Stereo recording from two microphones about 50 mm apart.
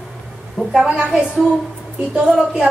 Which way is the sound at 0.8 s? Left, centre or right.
Right.